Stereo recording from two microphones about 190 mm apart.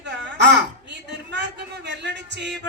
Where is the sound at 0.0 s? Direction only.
65° right (ahead or behind).